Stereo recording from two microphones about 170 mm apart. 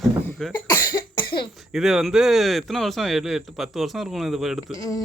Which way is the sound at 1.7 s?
Centre (ahead or behind).